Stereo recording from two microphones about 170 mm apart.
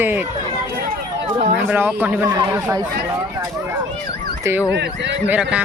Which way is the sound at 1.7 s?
10° right (ahead or behind).